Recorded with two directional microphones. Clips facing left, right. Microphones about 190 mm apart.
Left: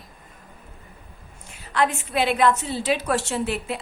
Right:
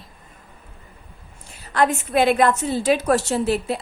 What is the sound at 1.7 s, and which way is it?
A woman's voice, 45° right (ahead or behind).